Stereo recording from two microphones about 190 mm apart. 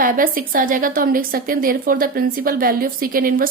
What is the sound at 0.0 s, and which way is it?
A woman's voice, 45° right (ahead or behind).